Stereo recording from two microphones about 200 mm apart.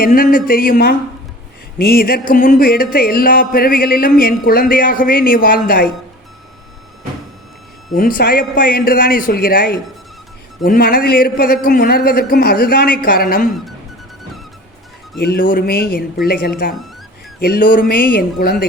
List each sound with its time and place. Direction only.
0.0 s music: 45° left (ahead or behind)
7.9 s music: 45° left (ahead or behind)
15.2 s music: 50° left (ahead or behind)